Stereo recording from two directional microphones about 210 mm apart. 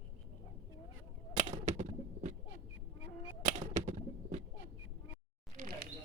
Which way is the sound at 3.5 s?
35° right (ahead or behind).